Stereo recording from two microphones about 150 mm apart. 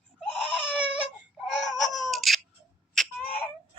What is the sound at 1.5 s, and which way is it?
Baby cry, centre (ahead or behind).